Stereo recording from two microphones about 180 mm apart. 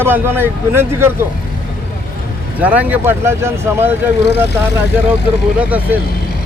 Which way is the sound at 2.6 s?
10° right (ahead or behind).